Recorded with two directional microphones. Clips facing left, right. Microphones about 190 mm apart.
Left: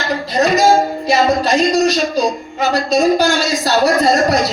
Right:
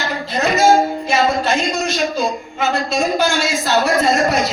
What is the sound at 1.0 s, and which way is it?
Speech, 35° left (ahead or behind).